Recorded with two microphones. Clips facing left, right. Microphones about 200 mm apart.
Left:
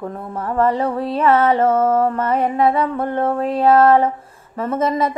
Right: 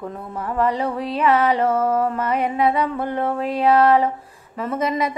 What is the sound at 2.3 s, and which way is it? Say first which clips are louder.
Speech: left 2 dB; 30° left (ahead or behind).